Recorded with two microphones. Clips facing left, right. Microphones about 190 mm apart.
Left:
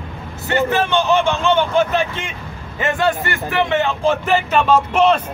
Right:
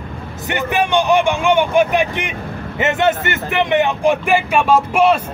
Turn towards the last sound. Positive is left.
turn(degrees=-10)  # may be behind; listen again after turning